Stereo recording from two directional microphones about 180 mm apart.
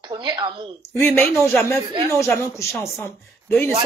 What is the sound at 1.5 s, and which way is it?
Speech, 15° left (ahead or behind).